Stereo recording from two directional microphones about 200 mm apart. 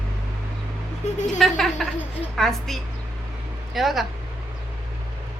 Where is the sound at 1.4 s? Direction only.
Centre (ahead or behind).